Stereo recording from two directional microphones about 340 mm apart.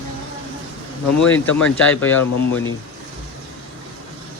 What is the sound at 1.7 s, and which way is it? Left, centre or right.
Speech, centre.